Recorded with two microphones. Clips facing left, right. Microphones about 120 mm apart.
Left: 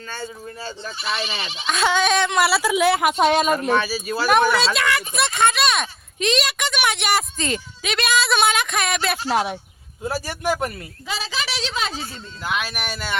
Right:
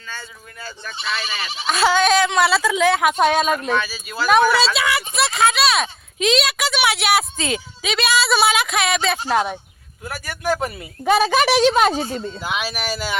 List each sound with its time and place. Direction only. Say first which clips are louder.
1.0 s speech: even; 30° left (ahead or behind)
1.6 s speech: right 3 dB; 5° right (ahead or behind)
3.7 s speech: left 2 dB; 35° left (ahead or behind)
4.3 s speech: right 2 dB; centre (ahead or behind)
10.0 s speech: left 3 dB; 30° left (ahead or behind)
11.0 s a woman's voice: right 13 dB; 55° right (ahead or behind)
12.4 s speech: right 1 dB; 10° right (ahead or behind)